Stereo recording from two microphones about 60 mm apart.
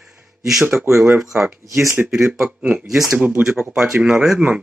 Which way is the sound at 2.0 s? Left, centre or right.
Centre.